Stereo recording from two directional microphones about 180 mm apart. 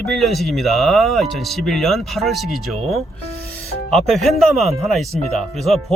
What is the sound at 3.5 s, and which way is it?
Music, centre (ahead or behind).